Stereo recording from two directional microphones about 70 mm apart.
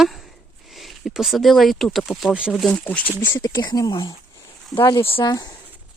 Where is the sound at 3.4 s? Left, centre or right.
Left.